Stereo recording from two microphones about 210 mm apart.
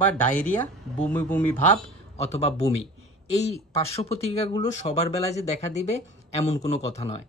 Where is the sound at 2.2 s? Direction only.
30° left (ahead or behind).